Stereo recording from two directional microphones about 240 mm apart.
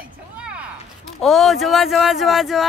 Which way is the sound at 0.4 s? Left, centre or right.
Centre.